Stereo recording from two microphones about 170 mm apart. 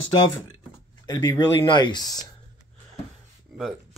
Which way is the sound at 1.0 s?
25° left (ahead or behind).